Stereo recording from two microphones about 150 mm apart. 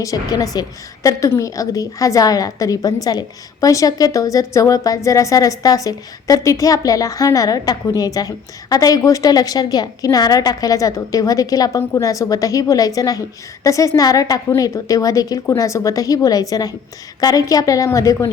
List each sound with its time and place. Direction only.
0.0 s a woman's voice: 25° left (ahead or behind)